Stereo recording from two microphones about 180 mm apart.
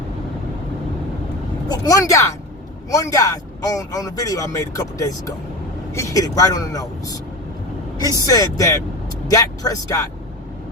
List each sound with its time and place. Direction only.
1.6 s speech: 20° left (ahead or behind)
8.3 s speech: 20° left (ahead or behind)